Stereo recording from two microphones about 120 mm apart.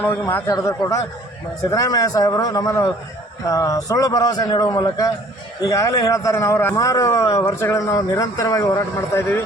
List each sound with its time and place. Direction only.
0.0 s a man's voice: 15° left (ahead or behind)
0.5 s a man's voice: 30° left (ahead or behind)